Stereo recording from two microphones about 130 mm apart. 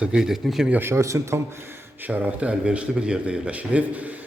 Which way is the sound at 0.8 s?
20° right (ahead or behind).